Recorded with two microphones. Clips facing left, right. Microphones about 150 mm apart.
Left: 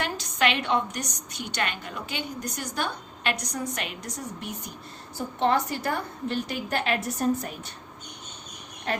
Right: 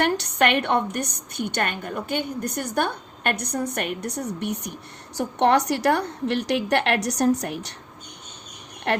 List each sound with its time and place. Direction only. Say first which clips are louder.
0.0 s a woman's voice: right 5 dB; 65° right (ahead or behind)
8.9 s speech: right 6 dB; 70° right (ahead or behind)